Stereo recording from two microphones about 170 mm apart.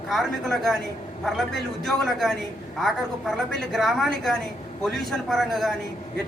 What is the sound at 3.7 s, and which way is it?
A woman's voice, centre (ahead or behind).